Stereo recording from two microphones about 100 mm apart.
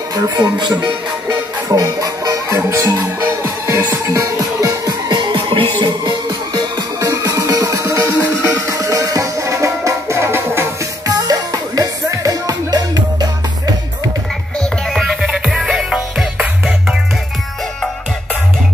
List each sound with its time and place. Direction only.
0.1 s speech: 40° right (ahead or behind)
1.3 s music: 35° right (ahead or behind)
7.0 s music: 30° right (ahead or behind)
11.1 s music: 40° right (ahead or behind)
15.0 s music: centre (ahead or behind)